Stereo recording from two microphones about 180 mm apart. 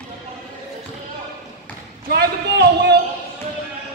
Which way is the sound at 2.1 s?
65° right (ahead or behind).